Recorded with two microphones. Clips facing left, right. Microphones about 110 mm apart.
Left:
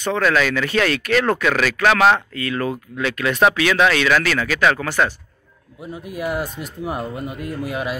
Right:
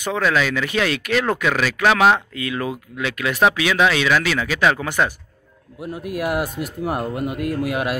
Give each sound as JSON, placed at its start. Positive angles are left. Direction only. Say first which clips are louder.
{"t": 0.0, "sound": "speech", "louder": "left 2 dB", "side_deg": -10}
{"t": 5.8, "sound": "speech", "louder": "right 3 dB", "side_deg": -5}
{"t": 7.3, "sound": "a man's voice", "louder": "right 5 dB", "side_deg": -65}
{"t": 7.6, "sound": "speech", "louder": "even", "side_deg": -5}